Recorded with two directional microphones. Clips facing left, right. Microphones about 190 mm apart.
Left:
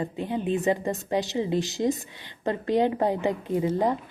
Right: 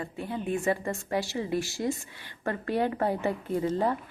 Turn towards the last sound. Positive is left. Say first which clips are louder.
# left 3 dB
turn(degrees=15)  # may be behind; listen again after turning